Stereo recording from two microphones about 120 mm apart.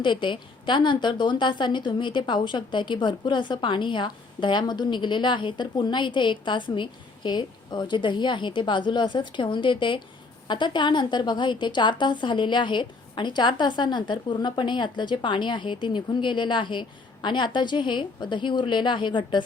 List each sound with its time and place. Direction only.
0.0 s a woman's voice: 40° left (ahead or behind)